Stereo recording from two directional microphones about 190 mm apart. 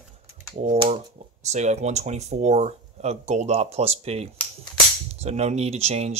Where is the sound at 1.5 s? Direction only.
35° right (ahead or behind).